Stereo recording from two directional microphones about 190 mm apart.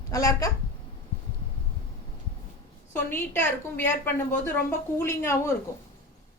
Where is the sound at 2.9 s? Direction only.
10° left (ahead or behind).